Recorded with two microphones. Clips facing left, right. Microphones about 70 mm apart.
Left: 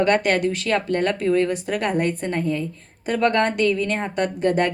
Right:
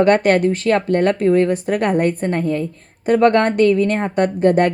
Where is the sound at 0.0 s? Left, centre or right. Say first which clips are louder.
Right 5 dB; right.